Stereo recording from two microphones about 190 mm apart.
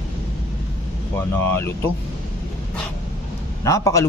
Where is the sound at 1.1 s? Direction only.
10° left (ahead or behind).